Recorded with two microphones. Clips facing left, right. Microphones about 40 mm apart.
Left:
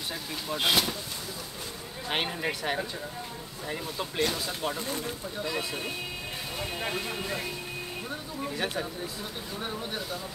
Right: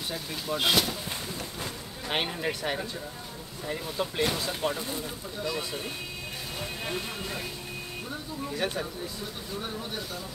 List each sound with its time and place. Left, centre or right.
0.1 s speech: centre
2.0 s speech: centre
4.8 s speech: left
5.6 s speech: centre
8.5 s speech: centre